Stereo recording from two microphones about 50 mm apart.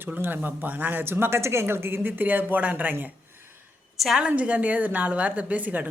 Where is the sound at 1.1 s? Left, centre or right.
Right.